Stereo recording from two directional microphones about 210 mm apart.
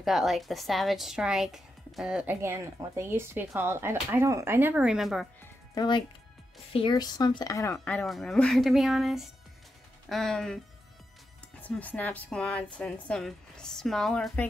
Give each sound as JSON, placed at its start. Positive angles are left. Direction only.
{"t": 0.0, "sound": "a woman's voice", "side_deg": 0}
{"t": 5.4, "sound": "music", "side_deg": 20}
{"t": 6.7, "sound": "a woman's voice", "side_deg": 20}
{"t": 11.6, "sound": "a woman's voice", "side_deg": 10}